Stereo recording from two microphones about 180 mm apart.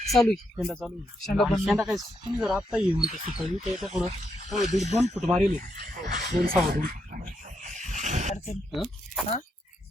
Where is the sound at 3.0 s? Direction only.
35° right (ahead or behind).